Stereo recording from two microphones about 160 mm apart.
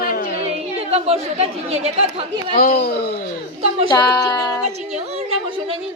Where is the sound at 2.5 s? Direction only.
65° left (ahead or behind).